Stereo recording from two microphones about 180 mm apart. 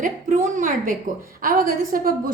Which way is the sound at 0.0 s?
45° right (ahead or behind).